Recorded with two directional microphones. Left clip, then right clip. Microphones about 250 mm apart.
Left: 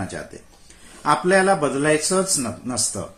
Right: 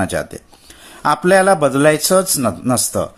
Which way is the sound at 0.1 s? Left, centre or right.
Right.